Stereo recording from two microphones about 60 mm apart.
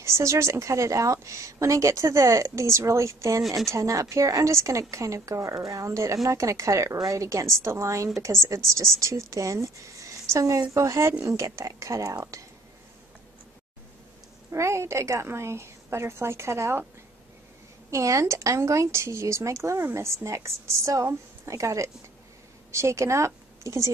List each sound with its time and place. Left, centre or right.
0.0 s a woman's voice: right
14.5 s speech: right
17.9 s a woman's voice: right